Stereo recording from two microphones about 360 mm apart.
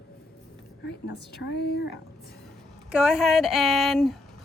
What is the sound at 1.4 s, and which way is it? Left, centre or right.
Speech, left.